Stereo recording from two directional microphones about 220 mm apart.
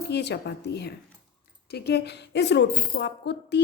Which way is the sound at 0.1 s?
50° left (ahead or behind).